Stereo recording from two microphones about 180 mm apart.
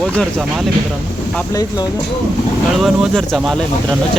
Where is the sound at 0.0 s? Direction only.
Centre (ahead or behind).